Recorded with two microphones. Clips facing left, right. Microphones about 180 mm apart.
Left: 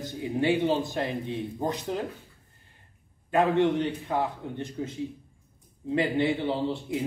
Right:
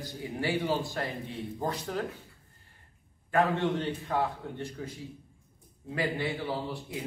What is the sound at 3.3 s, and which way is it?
A man's voice, 20° left (ahead or behind).